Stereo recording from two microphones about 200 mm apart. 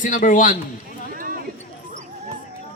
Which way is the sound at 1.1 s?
45° right (ahead or behind).